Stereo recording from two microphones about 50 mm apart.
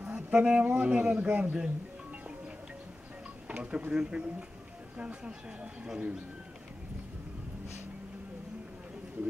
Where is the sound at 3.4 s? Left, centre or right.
Right.